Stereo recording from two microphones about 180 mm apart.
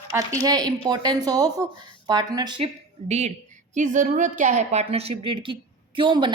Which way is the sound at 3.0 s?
40° right (ahead or behind).